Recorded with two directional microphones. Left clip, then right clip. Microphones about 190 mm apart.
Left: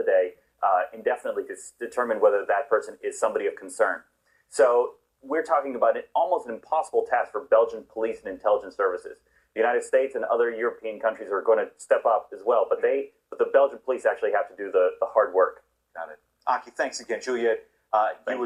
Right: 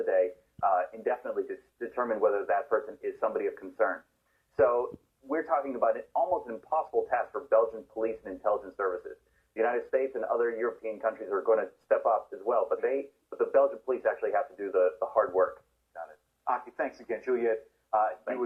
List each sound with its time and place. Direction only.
0.0 s speech: 35° left (ahead or behind)